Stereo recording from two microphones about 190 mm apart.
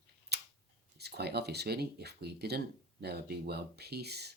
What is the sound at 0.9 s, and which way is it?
Speech, 60° right (ahead or behind).